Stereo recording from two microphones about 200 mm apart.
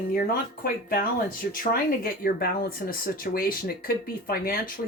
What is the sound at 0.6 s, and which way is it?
Speech, 45° left (ahead or behind).